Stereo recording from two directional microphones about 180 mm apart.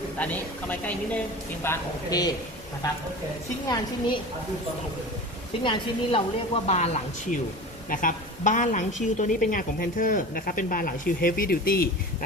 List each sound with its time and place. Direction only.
0.2 s a woman's voice: 10° left (ahead or behind)
3.7 s speech: 25° left (ahead or behind)
5.6 s a woman's voice: 30° left (ahead or behind); by 11.9 s 55° left (ahead or behind)